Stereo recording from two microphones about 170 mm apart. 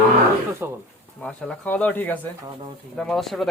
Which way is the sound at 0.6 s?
15° right (ahead or behind).